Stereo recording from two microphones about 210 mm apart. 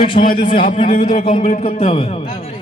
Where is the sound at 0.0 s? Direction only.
25° left (ahead or behind).